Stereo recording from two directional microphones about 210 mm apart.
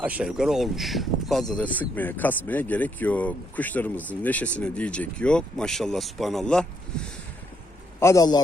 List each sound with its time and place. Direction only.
0.0 s speech: 5° right (ahead or behind)
7.9 s a man's voice: 15° left (ahead or behind)